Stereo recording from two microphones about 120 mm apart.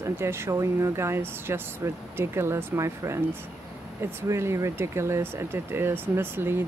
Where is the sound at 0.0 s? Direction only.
20° right (ahead or behind).